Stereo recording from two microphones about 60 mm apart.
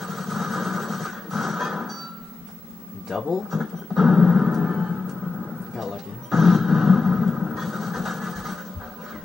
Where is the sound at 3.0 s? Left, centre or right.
Centre.